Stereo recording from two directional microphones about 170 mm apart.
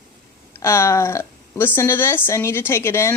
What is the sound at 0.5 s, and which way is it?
A woman's voice, 15° left (ahead or behind).